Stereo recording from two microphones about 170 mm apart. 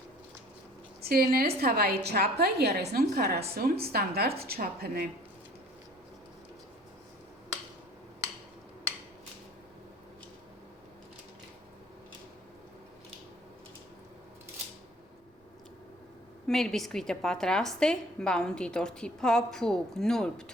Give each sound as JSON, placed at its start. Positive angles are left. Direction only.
{"t": 1.0, "sound": "a woman's voice", "side_deg": -60}
{"t": 16.5, "sound": "a woman's voice", "side_deg": 5}